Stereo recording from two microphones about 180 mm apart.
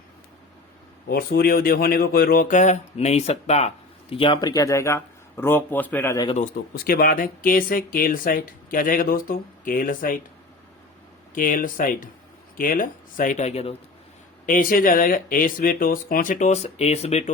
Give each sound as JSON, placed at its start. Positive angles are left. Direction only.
{"t": 1.0, "sound": "a man's voice", "side_deg": 55}
{"t": 6.7, "sound": "speech", "side_deg": 55}
{"t": 11.3, "sound": "speech", "side_deg": 50}
{"t": 14.4, "sound": "speech", "side_deg": 50}